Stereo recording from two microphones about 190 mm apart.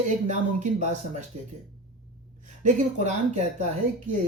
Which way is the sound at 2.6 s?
40° right (ahead or behind).